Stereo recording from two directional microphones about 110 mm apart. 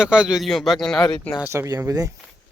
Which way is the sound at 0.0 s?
5° right (ahead or behind).